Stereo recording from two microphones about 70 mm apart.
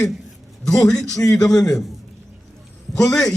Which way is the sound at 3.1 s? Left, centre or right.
Centre.